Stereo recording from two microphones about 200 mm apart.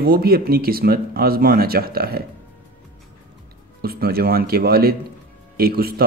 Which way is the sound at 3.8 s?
50° right (ahead or behind).